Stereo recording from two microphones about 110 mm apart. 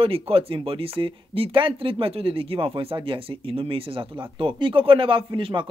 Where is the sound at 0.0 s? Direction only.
60° right (ahead or behind).